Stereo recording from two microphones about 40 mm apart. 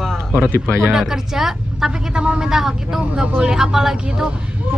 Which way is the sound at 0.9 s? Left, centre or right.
Centre.